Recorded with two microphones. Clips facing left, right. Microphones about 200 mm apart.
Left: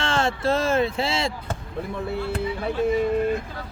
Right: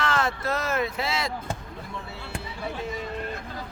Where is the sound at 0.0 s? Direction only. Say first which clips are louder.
Left 3 dB; 30° left (ahead or behind).